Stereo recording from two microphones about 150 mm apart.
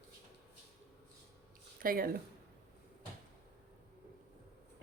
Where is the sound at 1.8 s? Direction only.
70° right (ahead or behind).